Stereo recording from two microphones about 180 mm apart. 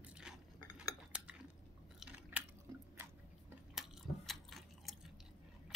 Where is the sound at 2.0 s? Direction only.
10° right (ahead or behind).